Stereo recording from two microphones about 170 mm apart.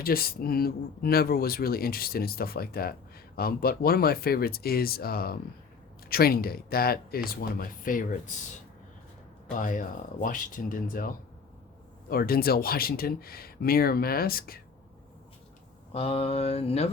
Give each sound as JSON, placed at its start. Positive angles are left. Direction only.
{"t": 0.0, "sound": "speech", "side_deg": 60}
{"t": 9.6, "sound": "speech", "side_deg": 50}
{"t": 15.9, "sound": "a sound", "side_deg": 35}